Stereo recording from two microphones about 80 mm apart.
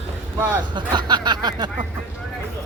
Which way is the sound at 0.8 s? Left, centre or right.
Right.